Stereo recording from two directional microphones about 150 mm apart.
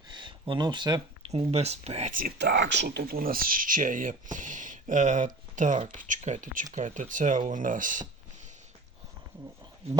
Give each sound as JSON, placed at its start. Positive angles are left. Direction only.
{"t": 0.1, "sound": "a sound", "side_deg": -30}
{"t": 1.3, "sound": "speech", "side_deg": -40}
{"t": 2.1, "sound": "speech", "side_deg": -80}